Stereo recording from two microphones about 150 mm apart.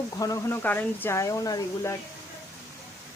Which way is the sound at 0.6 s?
10° left (ahead or behind).